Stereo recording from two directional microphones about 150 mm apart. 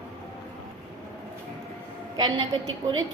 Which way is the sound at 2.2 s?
25° right (ahead or behind).